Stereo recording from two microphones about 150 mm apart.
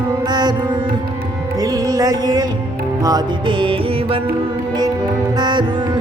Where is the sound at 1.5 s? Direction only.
25° right (ahead or behind).